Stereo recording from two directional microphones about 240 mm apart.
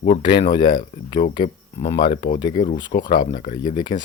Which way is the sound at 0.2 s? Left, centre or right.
Centre.